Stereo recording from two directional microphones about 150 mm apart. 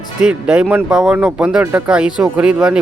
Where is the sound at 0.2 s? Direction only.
5° right (ahead or behind).